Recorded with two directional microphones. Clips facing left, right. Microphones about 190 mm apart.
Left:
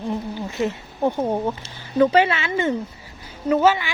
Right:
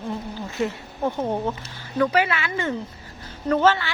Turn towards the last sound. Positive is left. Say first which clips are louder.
# left 2 dB
turn(degrees=10)  # may be behind; listen again after turning